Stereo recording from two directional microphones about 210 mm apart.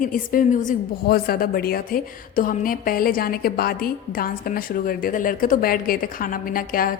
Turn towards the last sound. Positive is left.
turn(degrees=40)  # may be behind; listen again after turning